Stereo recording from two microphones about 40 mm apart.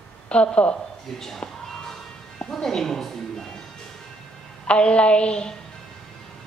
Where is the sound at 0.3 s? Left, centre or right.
Left.